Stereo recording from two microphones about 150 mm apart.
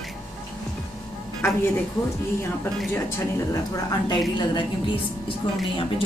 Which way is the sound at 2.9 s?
20° left (ahead or behind).